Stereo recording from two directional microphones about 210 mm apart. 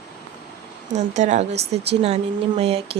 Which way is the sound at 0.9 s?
35° right (ahead or behind).